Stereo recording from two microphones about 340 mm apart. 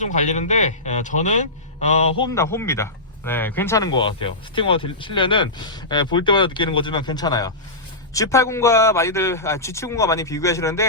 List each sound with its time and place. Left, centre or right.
0.0 s a man's voice: left